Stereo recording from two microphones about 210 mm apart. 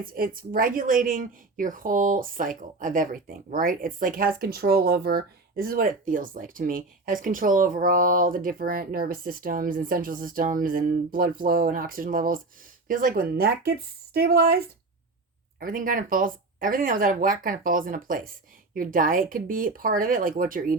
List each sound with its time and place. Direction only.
0.0 s speech: 45° right (ahead or behind)